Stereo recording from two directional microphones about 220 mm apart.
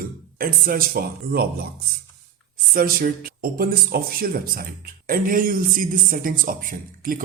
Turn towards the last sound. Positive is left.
turn(degrees=-40)  # may be behind; listen again after turning